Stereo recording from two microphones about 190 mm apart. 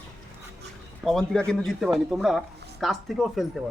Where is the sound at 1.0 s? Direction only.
5° left (ahead or behind).